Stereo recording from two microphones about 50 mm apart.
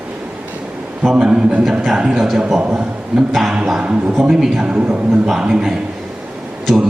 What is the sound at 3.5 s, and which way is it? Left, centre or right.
A man's voice, centre.